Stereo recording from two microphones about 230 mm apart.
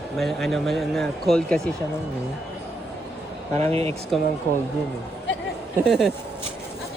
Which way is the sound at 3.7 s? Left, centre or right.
Right.